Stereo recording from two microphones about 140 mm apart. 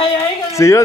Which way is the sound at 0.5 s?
20° left (ahead or behind).